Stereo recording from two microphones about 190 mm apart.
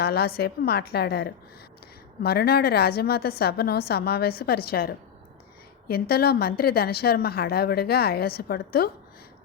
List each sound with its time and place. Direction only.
0.0 s a woman's voice: 55° left (ahead or behind)